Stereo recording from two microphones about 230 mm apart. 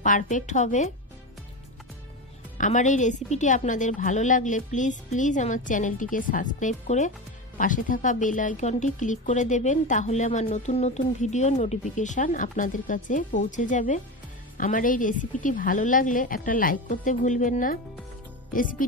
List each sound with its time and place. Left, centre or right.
0.0 s speech: left
2.5 s speech: left